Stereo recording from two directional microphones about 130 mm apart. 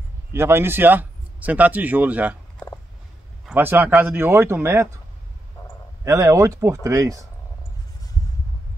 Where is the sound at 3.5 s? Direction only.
15° right (ahead or behind).